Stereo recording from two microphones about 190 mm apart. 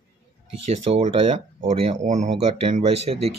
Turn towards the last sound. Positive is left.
turn(degrees=-30)  # may be behind; listen again after turning